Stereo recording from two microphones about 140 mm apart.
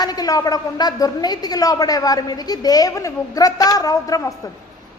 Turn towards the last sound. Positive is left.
turn(degrees=25)  # may be behind; listen again after turning